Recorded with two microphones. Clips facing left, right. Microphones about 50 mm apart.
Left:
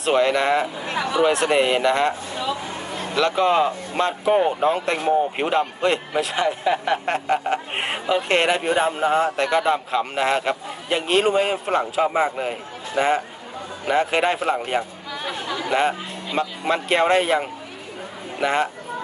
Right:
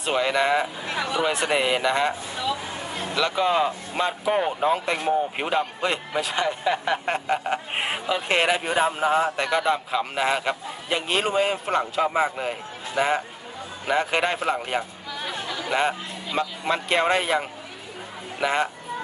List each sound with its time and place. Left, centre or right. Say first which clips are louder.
0.0 s speech: left 4 dB; centre
0.9 s speech: left 3 dB; left
1.3 s speech: left 4 dB; centre
3.2 s speech: left 4 dB; centre